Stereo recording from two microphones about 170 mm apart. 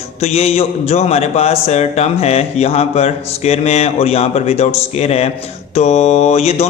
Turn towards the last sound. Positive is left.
turn(degrees=40)  # may be behind; listen again after turning